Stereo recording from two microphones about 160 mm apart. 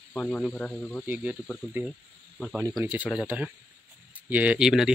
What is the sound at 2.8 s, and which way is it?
Speech, 10° right (ahead or behind).